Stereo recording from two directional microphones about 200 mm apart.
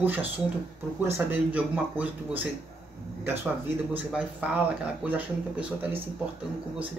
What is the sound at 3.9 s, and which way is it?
Speech, 5° right (ahead or behind).